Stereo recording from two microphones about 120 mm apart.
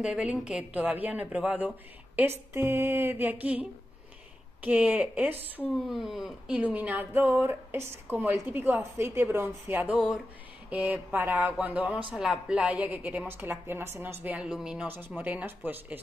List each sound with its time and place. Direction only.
0.0 s speech: 10° right (ahead or behind)
2.5 s mantra: 20° right (ahead or behind)
4.6 s speech: 15° right (ahead or behind)
5.9 s speech: 5° right (ahead or behind)
9.9 s a sound: 5° right (ahead or behind)
10.7 s speech: 15° right (ahead or behind)